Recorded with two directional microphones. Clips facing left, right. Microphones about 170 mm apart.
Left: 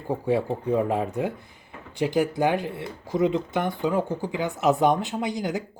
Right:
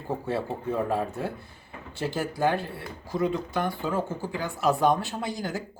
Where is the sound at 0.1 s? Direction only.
15° left (ahead or behind).